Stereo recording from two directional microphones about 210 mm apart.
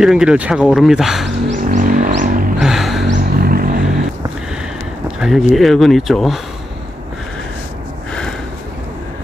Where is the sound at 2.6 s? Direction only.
Centre (ahead or behind).